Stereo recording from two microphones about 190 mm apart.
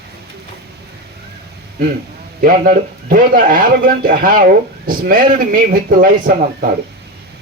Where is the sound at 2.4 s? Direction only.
50° right (ahead or behind).